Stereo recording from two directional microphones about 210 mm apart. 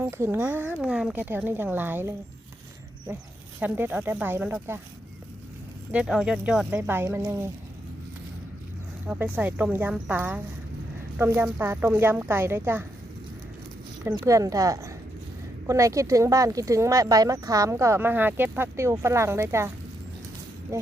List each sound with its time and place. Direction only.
0.0 s speech: 10° right (ahead or behind)
3.6 s speech: 10° right (ahead or behind)
5.9 s speech: 5° right (ahead or behind)
9.0 s speech: 10° right (ahead or behind)
14.1 s speech: 15° right (ahead or behind)